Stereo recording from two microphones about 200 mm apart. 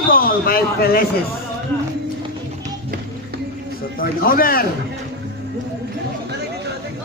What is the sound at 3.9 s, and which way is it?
Speech, 45° left (ahead or behind).